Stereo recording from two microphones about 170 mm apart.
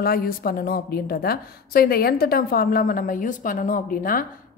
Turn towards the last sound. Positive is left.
turn(degrees=55)  # may be behind; listen again after turning